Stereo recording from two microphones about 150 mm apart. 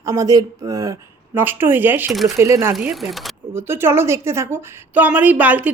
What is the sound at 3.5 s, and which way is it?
A woman's voice, 15° right (ahead or behind).